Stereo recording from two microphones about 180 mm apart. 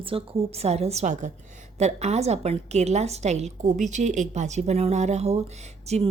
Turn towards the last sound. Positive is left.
turn(degrees=-35)  # may be behind; listen again after turning